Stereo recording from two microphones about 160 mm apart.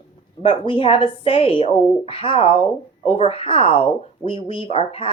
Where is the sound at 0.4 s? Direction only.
35° left (ahead or behind).